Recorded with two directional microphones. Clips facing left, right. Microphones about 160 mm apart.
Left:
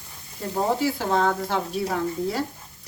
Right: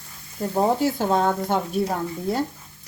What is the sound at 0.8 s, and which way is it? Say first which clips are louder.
Speech: right 2 dB; 45° right (ahead or behind).